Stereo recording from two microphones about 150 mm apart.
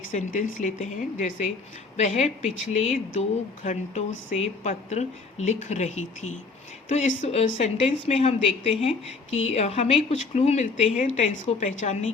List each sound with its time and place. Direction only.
0.1 s speech: 60° left (ahead or behind)